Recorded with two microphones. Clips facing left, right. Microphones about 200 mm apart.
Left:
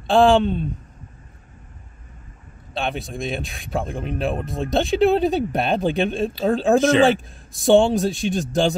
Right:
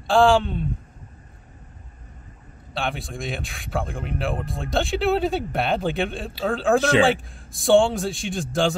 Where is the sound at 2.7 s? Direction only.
20° left (ahead or behind).